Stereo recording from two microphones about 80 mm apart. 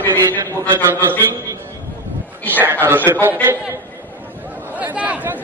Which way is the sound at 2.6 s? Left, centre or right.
Right.